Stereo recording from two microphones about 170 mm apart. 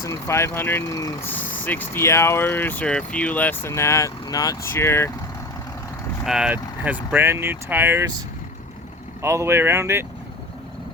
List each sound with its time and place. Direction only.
0.0 s speech: 15° left (ahead or behind)
6.2 s speech: 5° right (ahead or behind)
9.2 s speech: 15° right (ahead or behind)